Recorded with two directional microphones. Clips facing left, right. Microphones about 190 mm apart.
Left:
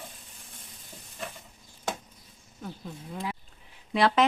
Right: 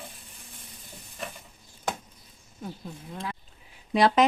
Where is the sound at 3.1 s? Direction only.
10° left (ahead or behind).